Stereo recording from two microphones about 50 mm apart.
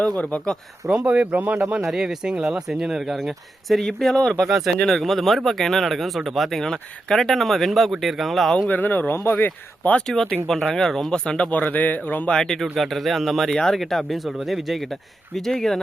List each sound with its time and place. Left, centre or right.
0.2 s speech: left
1.0 s speech: right
1.8 s speech: centre
4.4 s speech: centre
4.8 s speech: centre
6.6 s speech: centre
8.7 s speech: left
10.4 s speech: centre
11.5 s speech: left
12.3 s speech: centre